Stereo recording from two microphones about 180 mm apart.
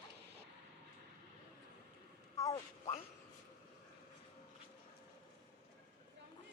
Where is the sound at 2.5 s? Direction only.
35° left (ahead or behind).